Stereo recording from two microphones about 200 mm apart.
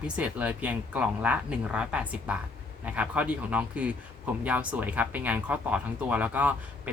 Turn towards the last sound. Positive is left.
turn(degrees=-5)  # may be behind; listen again after turning